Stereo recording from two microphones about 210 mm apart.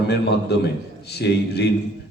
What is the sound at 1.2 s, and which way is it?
Speech, 50° left (ahead or behind).